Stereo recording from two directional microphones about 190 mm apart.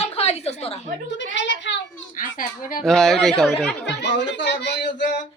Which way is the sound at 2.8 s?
5° left (ahead or behind).